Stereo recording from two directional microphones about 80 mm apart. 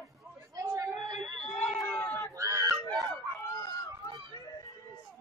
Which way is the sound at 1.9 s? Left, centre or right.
Left.